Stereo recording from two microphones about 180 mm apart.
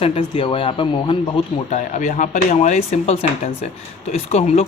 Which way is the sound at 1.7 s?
40° left (ahead or behind).